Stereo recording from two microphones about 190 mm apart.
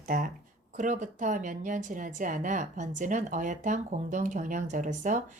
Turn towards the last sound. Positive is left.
turn(degrees=-40)  # may be behind; listen again after turning